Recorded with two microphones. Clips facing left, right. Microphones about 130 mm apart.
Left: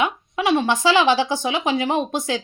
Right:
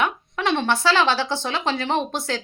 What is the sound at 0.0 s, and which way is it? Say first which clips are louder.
A woman's voice: left 2 dB; 10° left (ahead or behind).